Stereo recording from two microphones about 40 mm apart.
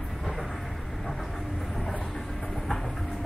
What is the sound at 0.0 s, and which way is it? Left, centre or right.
Train, centre.